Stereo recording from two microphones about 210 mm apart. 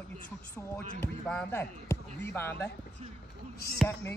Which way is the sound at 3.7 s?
10° left (ahead or behind).